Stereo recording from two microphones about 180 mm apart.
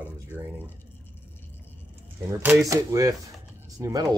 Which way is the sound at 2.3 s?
15° right (ahead or behind).